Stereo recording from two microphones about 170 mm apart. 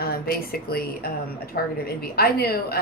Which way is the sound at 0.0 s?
60° left (ahead or behind).